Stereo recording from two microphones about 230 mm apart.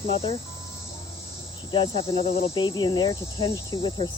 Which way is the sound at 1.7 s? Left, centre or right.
Left.